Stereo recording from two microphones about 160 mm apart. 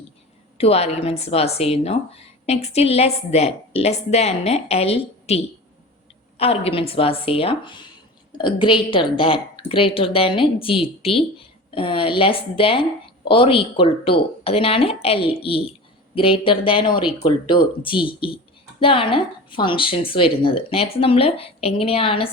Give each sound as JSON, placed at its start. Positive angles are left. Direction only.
{"t": 0.6, "sound": "a woman's voice", "side_deg": 40}